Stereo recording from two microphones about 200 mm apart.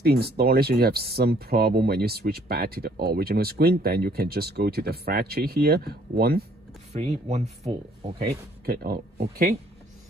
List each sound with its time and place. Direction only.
0.0 s speech: 50° right (ahead or behind)
6.9 s speech: 35° right (ahead or behind)
8.2 s speech: 50° right (ahead or behind)